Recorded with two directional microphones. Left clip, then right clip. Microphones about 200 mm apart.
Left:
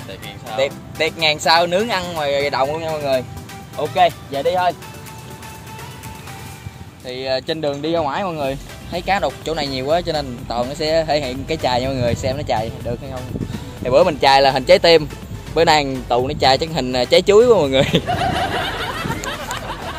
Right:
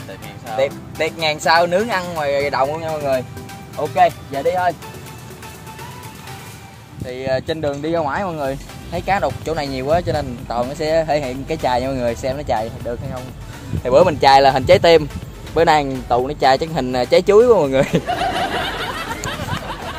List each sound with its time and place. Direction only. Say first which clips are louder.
0.6 s speech: even; 5° right (ahead or behind)
7.1 s speech: even; 10° right (ahead or behind)
13.8 s speech: right 1 dB; 25° right (ahead or behind); by 20.0 s centre (ahead or behind)